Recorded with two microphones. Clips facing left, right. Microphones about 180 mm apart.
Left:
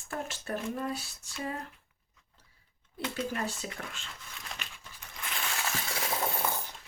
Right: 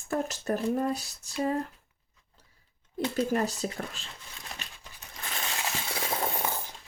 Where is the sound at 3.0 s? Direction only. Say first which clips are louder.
Right 6 dB; 40° right (ahead or behind).